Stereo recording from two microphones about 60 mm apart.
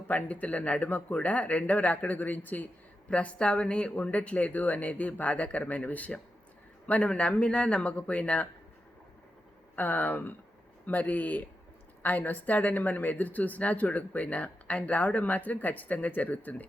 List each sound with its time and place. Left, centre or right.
0.1 s a woman's voice: left
3.1 s a woman's voice: centre
9.7 s a woman's voice: left